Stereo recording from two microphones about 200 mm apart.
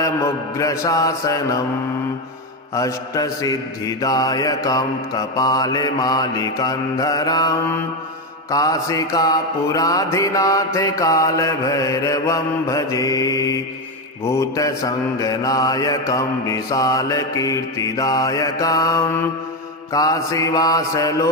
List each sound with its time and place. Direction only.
0.0 s mantra: 15° left (ahead or behind)
2.7 s mantra: 15° left (ahead or behind)